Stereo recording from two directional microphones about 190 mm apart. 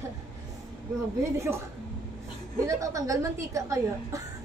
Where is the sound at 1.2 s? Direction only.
15° right (ahead or behind).